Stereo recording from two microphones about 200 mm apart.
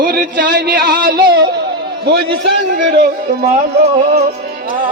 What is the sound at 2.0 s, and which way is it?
Speech, 55° right (ahead or behind).